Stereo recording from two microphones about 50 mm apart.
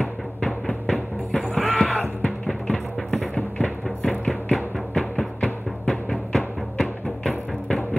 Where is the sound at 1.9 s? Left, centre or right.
Left.